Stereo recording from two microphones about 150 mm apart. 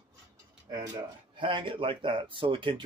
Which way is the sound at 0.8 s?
30° right (ahead or behind).